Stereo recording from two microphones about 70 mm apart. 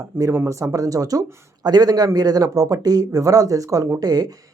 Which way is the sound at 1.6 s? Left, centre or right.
Right.